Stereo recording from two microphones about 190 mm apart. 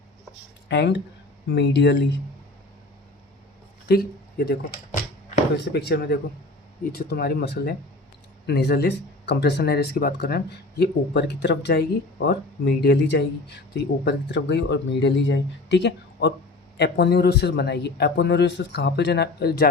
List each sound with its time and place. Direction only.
0.7 s speech: 65° left (ahead or behind)
3.8 s speech: 55° left (ahead or behind)
5.5 s speech: 60° left (ahead or behind)